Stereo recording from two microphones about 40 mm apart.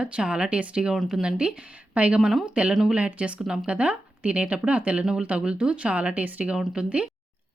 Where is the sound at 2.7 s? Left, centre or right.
Centre.